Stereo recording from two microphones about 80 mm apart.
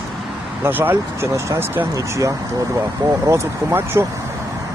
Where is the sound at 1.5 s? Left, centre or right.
Right.